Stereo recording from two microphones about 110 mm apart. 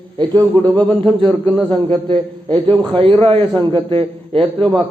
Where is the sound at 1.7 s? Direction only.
50° right (ahead or behind).